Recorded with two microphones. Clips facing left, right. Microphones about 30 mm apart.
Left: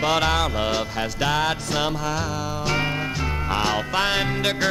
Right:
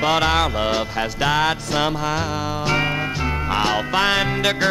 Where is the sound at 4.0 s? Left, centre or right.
Right.